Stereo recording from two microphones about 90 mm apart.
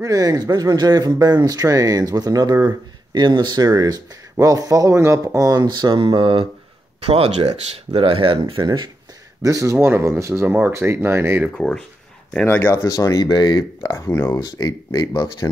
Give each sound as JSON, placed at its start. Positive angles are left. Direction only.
{"t": 0.0, "sound": "speech", "side_deg": -40}
{"t": 7.9, "sound": "speech", "side_deg": -85}
{"t": 8.5, "sound": "speech", "side_deg": -55}
{"t": 9.4, "sound": "speech", "side_deg": -40}
{"t": 11.5, "sound": "speech", "side_deg": 5}
{"t": 12.4, "sound": "speech", "side_deg": 25}
{"t": 12.8, "sound": "speech", "side_deg": 40}
{"t": 14.4, "sound": "speech", "side_deg": 45}